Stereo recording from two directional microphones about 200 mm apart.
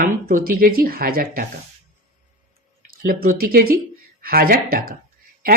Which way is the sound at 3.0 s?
45° right (ahead or behind).